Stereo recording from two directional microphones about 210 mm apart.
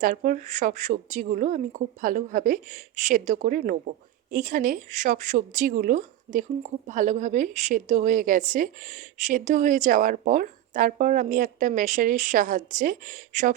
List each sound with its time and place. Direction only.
0.0 s speech: 40° right (ahead or behind)